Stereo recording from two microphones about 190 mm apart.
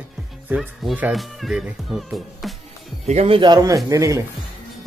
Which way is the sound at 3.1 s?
30° right (ahead or behind).